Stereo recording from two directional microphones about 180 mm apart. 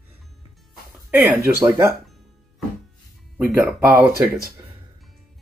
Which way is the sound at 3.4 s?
10° right (ahead or behind).